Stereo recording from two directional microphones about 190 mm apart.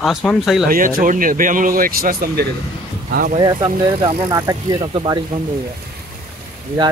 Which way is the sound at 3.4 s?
20° right (ahead or behind).